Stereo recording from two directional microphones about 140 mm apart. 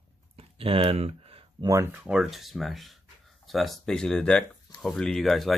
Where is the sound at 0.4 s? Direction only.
45° right (ahead or behind).